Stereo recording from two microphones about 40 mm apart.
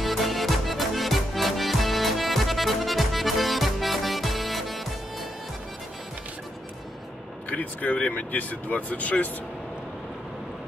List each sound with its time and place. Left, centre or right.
0.0 s music: centre
7.4 s vehicle: left
8.2 s speech: left